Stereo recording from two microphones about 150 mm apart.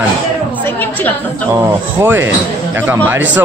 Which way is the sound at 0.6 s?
10° left (ahead or behind).